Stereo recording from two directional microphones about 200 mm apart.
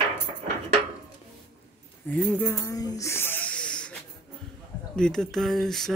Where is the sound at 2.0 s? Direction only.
5° left (ahead or behind).